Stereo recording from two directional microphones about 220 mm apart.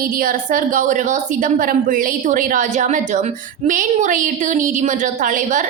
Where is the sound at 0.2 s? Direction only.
40° right (ahead or behind).